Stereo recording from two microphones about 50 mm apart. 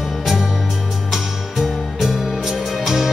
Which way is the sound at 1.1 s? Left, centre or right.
Centre.